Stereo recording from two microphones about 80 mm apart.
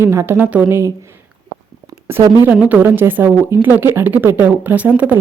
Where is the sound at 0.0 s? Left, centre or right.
Right.